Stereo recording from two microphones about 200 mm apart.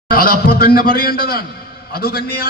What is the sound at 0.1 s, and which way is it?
A man's voice, 50° left (ahead or behind).